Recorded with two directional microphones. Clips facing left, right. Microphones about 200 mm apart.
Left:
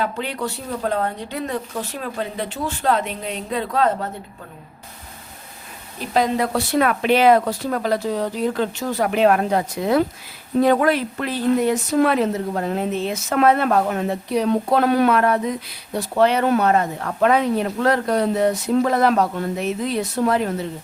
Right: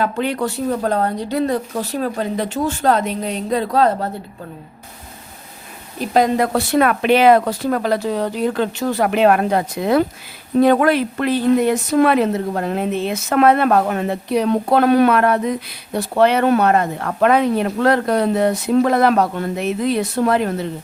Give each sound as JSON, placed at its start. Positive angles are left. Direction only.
{"t": 0.0, "sound": "speech", "side_deg": -50}
{"t": 6.1, "sound": "speech", "side_deg": -50}